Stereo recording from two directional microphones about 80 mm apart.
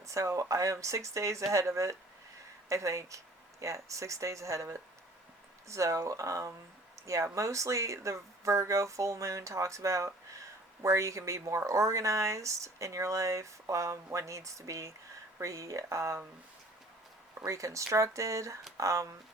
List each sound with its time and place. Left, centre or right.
0.0 s speech: right
17.4 s speech: right